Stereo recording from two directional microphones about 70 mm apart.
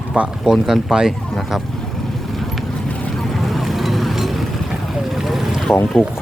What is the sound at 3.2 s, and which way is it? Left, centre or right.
Vehicle, centre.